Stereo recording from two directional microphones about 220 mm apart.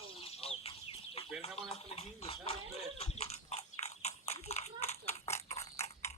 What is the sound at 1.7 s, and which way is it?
Speech, 25° left (ahead or behind).